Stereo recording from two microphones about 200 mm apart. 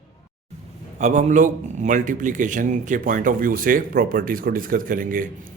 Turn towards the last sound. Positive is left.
turn(degrees=-45)  # may be behind; listen again after turning